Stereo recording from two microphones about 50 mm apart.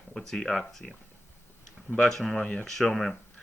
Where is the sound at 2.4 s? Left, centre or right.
Centre.